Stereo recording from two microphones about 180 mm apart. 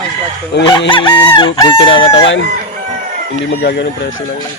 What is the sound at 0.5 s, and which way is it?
Speech, 70° left (ahead or behind).